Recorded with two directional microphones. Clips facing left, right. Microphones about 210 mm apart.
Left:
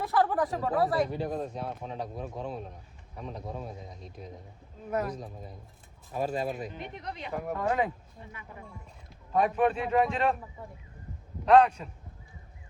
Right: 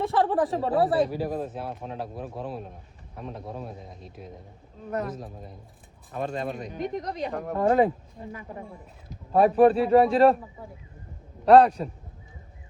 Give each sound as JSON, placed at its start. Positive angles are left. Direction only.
{"t": 0.0, "sound": "speech", "side_deg": -30}
{"t": 1.1, "sound": "speech", "side_deg": -5}
{"t": 6.7, "sound": "speech", "side_deg": -40}
{"t": 7.3, "sound": "speech", "side_deg": 5}
{"t": 7.5, "sound": "speech", "side_deg": -35}
{"t": 11.4, "sound": "speech", "side_deg": -35}